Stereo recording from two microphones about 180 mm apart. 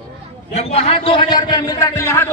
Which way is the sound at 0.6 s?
35° left (ahead or behind).